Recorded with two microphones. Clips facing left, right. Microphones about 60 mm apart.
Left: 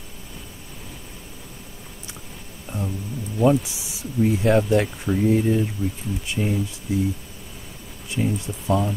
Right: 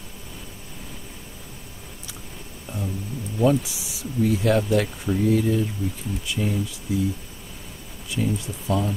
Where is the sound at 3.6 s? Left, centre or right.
Left.